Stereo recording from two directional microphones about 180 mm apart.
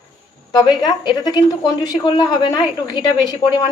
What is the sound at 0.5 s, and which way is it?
Speech, 20° left (ahead or behind).